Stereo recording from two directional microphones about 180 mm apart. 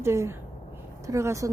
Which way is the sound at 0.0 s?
15° right (ahead or behind).